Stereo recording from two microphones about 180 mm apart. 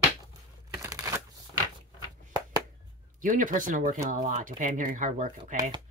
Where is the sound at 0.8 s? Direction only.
15° right (ahead or behind).